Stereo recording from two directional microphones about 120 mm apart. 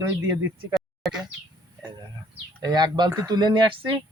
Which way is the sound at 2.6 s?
35° right (ahead or behind).